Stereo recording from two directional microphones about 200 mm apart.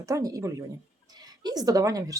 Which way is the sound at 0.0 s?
15° right (ahead or behind).